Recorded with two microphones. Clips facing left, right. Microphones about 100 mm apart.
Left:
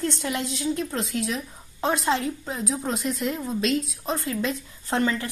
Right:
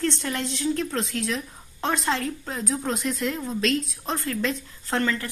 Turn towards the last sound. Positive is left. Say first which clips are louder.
# left 1 dB
turn(degrees=20)  # may be behind; listen again after turning